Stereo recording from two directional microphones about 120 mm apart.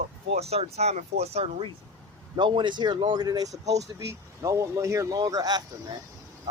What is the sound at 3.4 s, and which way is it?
Speech, 70° right (ahead or behind).